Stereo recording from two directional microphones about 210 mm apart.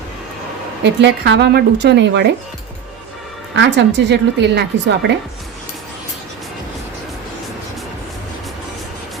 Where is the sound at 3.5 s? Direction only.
55° right (ahead or behind).